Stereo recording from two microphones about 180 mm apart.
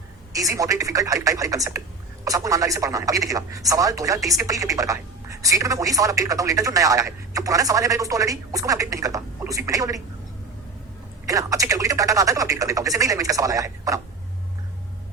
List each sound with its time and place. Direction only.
0.3 s speech: 20° right (ahead or behind)
11.3 s speech: 20° right (ahead or behind)